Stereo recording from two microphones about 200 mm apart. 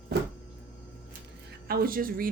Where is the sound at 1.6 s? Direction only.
50° right (ahead or behind).